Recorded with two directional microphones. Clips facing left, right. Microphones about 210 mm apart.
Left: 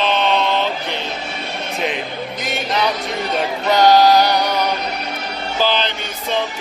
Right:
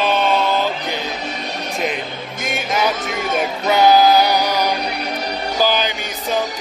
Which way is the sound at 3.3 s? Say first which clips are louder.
Even; 5° right (ahead or behind).